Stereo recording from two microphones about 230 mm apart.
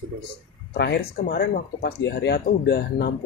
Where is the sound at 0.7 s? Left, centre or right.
Left.